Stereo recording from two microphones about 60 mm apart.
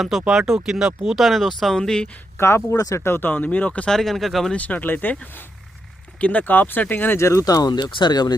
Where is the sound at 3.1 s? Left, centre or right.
Left.